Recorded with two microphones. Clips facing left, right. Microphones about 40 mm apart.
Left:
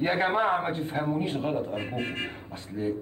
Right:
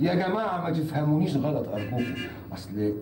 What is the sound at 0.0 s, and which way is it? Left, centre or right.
A man's voice, left.